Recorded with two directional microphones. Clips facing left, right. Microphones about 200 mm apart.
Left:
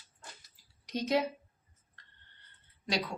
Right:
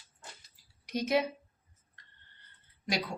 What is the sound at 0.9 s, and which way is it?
Speech, 10° right (ahead or behind).